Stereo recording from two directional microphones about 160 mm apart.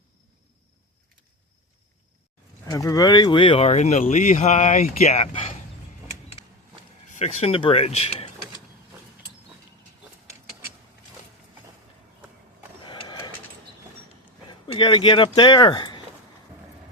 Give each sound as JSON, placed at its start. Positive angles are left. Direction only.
{"t": 2.6, "sound": "speech", "side_deg": 20}
{"t": 7.2, "sound": "speech", "side_deg": 40}
{"t": 12.8, "sound": "printer", "side_deg": 30}
{"t": 14.4, "sound": "a sound", "side_deg": 30}
{"t": 15.4, "sound": "speech", "side_deg": 25}